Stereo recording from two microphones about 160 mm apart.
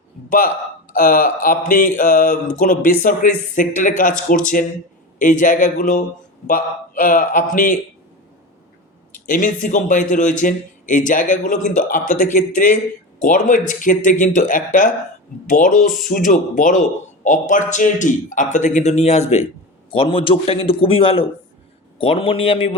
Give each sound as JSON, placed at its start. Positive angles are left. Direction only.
{"t": 0.3, "sound": "speech", "side_deg": 60}
{"t": 9.2, "sound": "a man's voice", "side_deg": 55}